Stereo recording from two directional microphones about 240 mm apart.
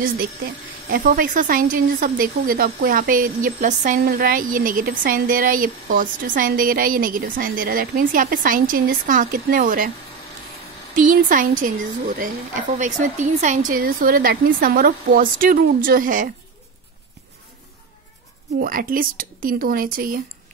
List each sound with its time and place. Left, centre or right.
0.8 s a woman's voice: right
11.0 s a woman's voice: right
18.6 s a woman's voice: right